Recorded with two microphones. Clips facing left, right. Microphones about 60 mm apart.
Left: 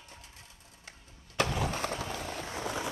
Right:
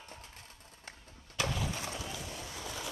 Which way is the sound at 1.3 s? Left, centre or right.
Left.